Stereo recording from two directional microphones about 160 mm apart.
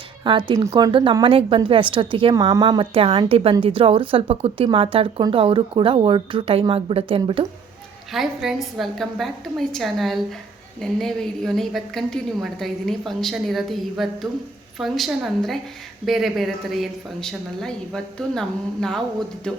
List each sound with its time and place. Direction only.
0.3 s speech: 30° right (ahead or behind)
8.1 s a woman's voice: centre (ahead or behind)